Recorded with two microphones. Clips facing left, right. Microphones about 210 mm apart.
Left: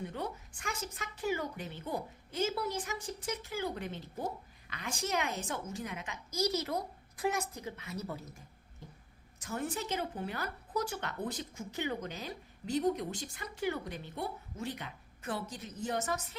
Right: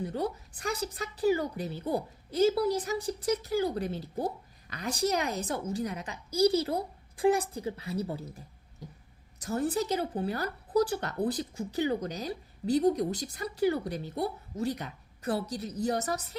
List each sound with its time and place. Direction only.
0.0 s speech: 35° right (ahead or behind)